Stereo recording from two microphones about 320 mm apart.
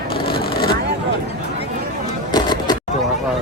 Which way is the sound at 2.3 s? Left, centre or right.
Centre.